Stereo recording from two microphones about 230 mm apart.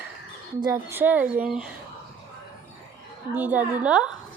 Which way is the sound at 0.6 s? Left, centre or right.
Centre.